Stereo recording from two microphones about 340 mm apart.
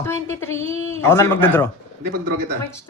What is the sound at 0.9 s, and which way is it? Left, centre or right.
Speech, centre.